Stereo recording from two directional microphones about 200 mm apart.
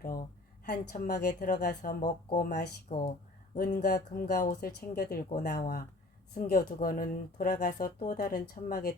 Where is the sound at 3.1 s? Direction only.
35° left (ahead or behind).